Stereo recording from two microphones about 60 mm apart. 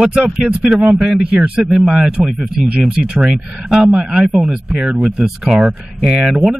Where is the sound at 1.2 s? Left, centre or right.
Centre.